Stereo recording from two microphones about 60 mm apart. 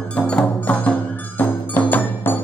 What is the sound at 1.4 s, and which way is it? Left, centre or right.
Music, left.